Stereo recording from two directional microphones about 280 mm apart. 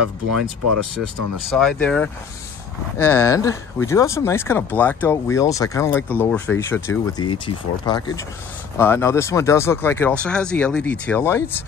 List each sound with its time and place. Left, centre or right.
0.0 s speech: right
1.5 s speech: centre